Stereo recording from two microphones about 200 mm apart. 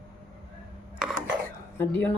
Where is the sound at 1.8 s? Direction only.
10° left (ahead or behind).